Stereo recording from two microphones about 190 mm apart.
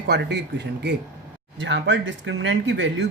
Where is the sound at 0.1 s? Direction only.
60° right (ahead or behind).